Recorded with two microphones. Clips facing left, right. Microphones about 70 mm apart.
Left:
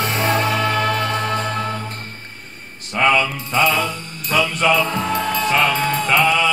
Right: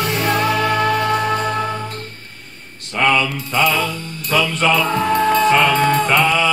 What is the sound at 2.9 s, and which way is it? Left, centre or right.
Mantra, centre.